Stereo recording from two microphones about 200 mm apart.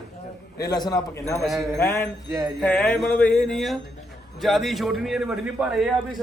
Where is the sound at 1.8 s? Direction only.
15° left (ahead or behind).